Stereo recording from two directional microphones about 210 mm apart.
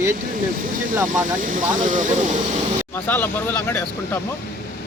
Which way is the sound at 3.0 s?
10° left (ahead or behind).